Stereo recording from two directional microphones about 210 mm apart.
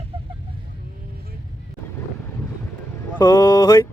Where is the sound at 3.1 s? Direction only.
15° left (ahead or behind).